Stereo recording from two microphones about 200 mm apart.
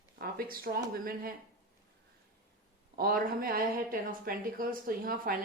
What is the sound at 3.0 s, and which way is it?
Speech, 45° right (ahead or behind).